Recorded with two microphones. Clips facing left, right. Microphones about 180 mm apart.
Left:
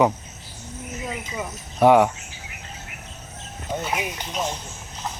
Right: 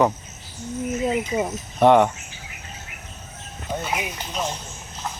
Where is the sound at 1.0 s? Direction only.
30° right (ahead or behind).